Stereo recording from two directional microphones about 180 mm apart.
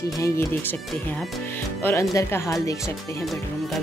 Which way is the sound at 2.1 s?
15° left (ahead or behind).